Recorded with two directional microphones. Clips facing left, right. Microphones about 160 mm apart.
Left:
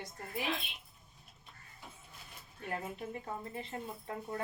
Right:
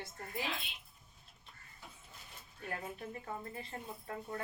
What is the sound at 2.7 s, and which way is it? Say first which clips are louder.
Speech: left 3 dB; 25° left (ahead or behind).